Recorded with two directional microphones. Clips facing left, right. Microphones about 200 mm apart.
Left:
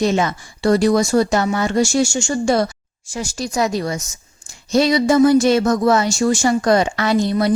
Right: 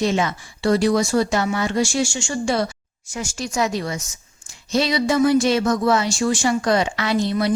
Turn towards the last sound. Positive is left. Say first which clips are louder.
# left 3 dB
turn(degrees=45)  # may be behind; listen again after turning